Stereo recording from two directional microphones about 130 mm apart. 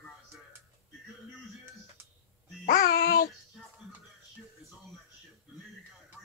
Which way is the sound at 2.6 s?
90° left.